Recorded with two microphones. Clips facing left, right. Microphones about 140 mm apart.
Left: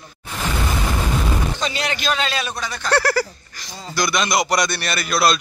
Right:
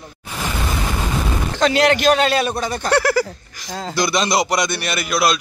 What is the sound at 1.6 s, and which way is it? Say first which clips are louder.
A man's voice: right 9 dB; 85° right.